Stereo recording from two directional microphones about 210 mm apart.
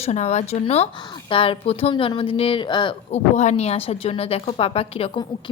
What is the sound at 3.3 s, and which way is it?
A woman's voice, 30° left (ahead or behind).